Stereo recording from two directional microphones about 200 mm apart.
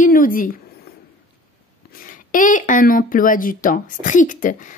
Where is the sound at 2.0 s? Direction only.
40° left (ahead or behind).